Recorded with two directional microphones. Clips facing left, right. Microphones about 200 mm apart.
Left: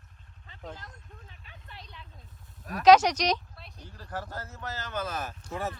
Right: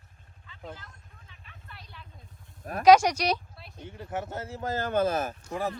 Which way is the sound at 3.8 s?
25° right (ahead or behind).